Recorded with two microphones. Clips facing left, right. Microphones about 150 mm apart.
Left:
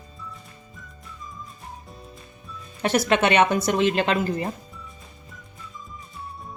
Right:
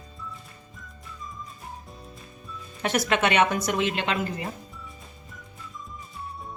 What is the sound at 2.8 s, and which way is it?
A woman's voice, 35° left (ahead or behind).